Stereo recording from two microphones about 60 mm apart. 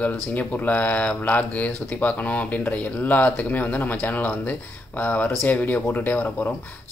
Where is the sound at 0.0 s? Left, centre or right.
Left.